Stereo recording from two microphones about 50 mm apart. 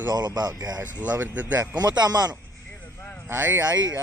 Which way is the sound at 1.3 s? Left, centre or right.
Right.